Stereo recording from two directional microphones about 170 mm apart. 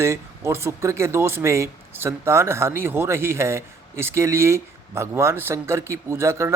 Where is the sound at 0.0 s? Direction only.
15° right (ahead or behind).